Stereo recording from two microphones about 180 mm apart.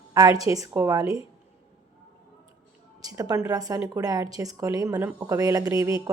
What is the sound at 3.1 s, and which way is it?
Speech, 20° right (ahead or behind).